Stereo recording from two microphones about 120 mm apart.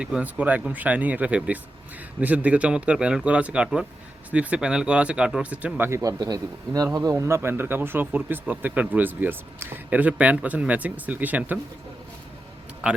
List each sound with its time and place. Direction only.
0.0 s speech: 10° right (ahead or behind)
6.0 s speech: 35° right (ahead or behind); by 11.6 s 15° right (ahead or behind)
12.8 s speech: 10° right (ahead or behind)